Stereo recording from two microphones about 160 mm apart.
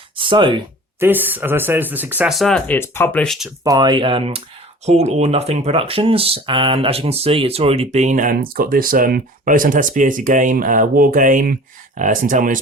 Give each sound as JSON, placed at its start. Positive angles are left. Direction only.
{"t": 0.2, "sound": "speech", "side_deg": -30}
{"t": 0.9, "sound": "speech", "side_deg": -15}
{"t": 2.3, "sound": "speech", "side_deg": 0}
{"t": 3.6, "sound": "speech", "side_deg": -25}